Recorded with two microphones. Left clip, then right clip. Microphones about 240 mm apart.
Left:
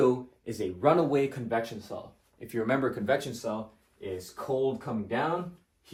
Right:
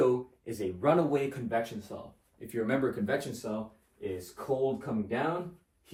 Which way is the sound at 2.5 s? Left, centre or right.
Left.